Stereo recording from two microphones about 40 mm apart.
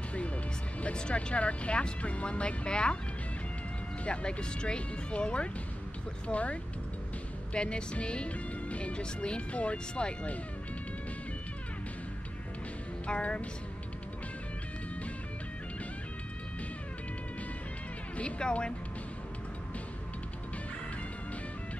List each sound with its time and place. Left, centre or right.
0.9 s speech: left
4.0 s speech: left
13.0 s speech: left
18.1 s speech: left